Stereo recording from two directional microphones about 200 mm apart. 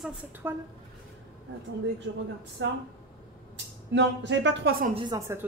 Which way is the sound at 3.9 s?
65° right (ahead or behind).